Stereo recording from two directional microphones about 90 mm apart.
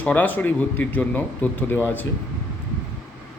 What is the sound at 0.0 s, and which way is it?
A man's voice, 20° left (ahead or behind).